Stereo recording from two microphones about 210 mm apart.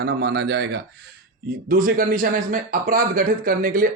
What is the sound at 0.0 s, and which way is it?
Speech, 55° right (ahead or behind).